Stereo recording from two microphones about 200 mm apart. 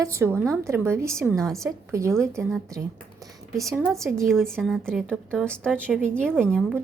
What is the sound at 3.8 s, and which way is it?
A woman's voice, centre (ahead or behind).